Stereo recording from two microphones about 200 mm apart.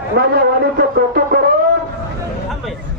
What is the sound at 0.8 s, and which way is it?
Music, 45° right (ahead or behind).